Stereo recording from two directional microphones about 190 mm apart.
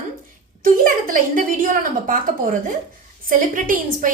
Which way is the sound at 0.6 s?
45° right (ahead or behind).